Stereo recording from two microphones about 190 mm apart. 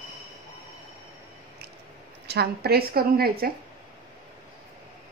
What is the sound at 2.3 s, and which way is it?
A woman's voice, 55° right (ahead or behind).